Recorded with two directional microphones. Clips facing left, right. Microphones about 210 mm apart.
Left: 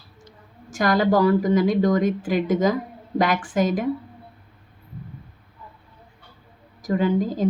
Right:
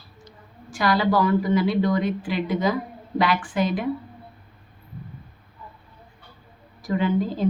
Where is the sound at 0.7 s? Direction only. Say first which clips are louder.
Left 2 dB; 45° left (ahead or behind).